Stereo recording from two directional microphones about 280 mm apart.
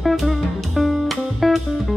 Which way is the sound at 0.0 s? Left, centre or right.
Centre.